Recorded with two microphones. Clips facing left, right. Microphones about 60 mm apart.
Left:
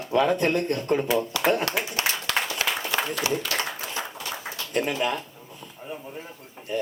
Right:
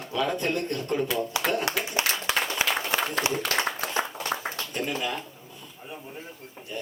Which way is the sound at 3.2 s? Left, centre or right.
Right.